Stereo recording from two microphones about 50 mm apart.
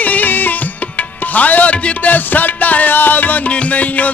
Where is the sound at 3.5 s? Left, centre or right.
Left.